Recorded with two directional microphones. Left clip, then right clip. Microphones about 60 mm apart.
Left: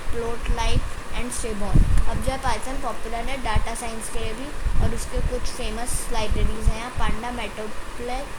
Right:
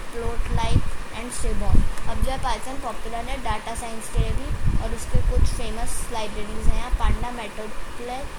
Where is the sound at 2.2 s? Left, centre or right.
Left.